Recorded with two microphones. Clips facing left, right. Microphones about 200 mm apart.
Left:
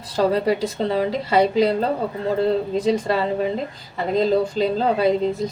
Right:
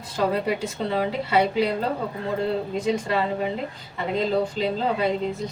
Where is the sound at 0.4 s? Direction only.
35° left (ahead or behind).